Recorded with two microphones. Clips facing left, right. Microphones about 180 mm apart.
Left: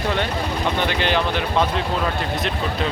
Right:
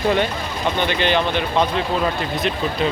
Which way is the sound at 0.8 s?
Centre (ahead or behind).